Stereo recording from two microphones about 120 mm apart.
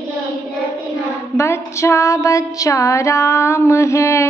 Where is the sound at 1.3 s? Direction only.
25° left (ahead or behind).